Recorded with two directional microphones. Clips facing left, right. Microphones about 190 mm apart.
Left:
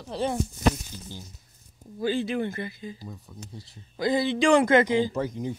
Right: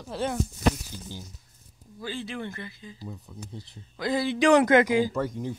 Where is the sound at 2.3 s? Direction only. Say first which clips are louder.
Left 7 dB; 45° left (ahead or behind).